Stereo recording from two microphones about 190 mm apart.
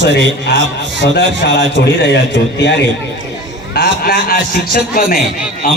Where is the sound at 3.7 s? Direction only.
50° left (ahead or behind).